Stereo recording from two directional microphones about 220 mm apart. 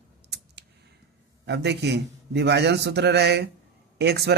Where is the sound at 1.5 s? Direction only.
50° right (ahead or behind).